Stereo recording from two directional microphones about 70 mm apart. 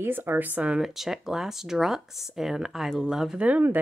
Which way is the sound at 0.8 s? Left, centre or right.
Centre.